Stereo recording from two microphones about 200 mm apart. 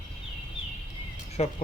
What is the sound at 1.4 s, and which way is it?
Speech, 30° left (ahead or behind).